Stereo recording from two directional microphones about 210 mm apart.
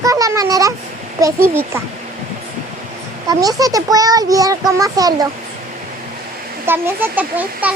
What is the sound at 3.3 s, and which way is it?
A child's voice, 15° right (ahead or behind).